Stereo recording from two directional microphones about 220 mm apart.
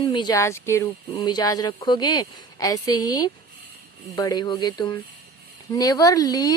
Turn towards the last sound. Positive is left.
turn(degrees=15)  # may be behind; listen again after turning